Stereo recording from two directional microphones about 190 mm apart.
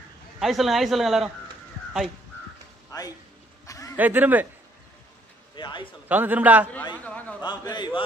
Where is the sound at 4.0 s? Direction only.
10° right (ahead or behind).